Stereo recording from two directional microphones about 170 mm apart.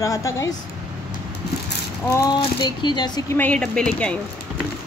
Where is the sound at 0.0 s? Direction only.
20° left (ahead or behind).